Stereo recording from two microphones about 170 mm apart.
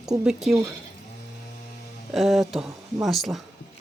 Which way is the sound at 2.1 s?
Centre (ahead or behind).